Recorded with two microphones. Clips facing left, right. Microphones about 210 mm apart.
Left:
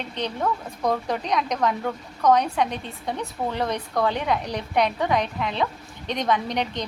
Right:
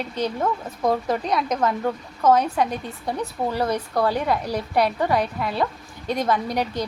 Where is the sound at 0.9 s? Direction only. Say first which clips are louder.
Right 2 dB; 5° right (ahead or behind).